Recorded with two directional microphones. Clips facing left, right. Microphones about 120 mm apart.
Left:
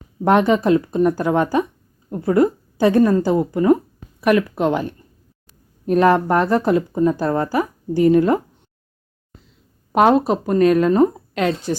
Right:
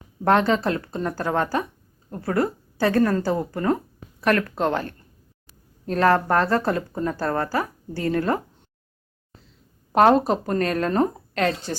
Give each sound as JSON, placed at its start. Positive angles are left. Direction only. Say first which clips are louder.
{"t": 0.3, "sound": "a woman's voice", "louder": "left 5 dB", "side_deg": 15}
{"t": 9.9, "sound": "a woman's voice", "louder": "left 2 dB", "side_deg": 10}